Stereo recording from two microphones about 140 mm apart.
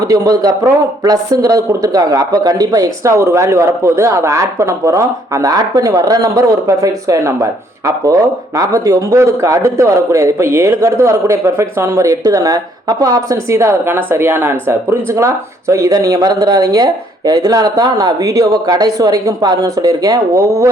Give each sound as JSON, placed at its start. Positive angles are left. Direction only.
{"t": 0.1, "sound": "a man's voice", "side_deg": -25}